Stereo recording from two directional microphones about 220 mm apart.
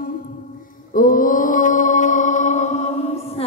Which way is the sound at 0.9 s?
40° left (ahead or behind).